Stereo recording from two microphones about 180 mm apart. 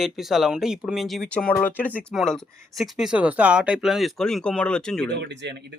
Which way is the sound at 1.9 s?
Centre (ahead or behind).